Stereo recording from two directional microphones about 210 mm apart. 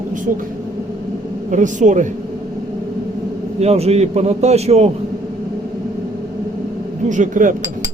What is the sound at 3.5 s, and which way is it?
A man's voice, 30° right (ahead or behind).